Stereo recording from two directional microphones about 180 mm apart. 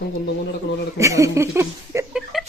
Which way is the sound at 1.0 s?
15° right (ahead or behind).